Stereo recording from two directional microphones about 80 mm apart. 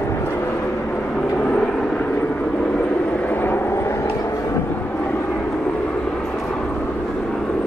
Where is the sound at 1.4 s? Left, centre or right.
Centre.